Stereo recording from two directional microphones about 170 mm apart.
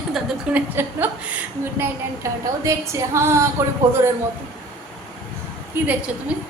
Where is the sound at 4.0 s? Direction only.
20° right (ahead or behind).